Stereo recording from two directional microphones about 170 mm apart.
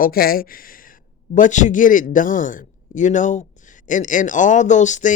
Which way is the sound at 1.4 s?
45° left (ahead or behind).